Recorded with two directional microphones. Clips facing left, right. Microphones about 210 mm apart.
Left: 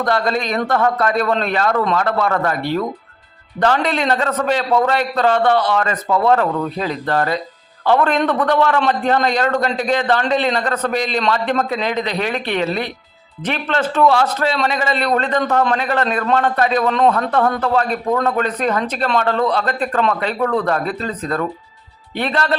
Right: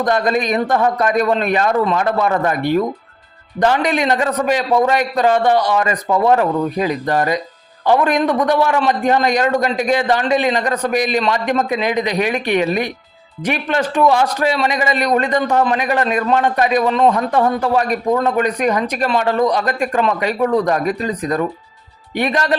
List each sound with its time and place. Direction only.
0.0 s speech: 15° right (ahead or behind)